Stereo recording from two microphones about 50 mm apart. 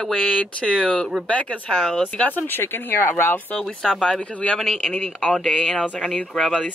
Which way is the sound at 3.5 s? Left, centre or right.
Centre.